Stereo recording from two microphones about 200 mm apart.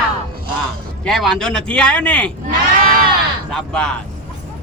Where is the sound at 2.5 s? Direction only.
45° right (ahead or behind).